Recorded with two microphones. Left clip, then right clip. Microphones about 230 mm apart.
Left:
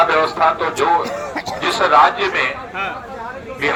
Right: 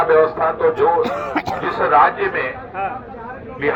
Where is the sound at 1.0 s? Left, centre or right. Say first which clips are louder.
Right 3 dB; right.